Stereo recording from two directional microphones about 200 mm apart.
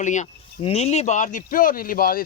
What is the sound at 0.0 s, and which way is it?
Speech, 35° left (ahead or behind).